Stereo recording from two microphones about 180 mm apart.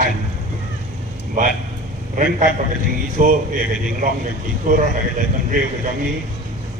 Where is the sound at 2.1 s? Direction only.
45° right (ahead or behind).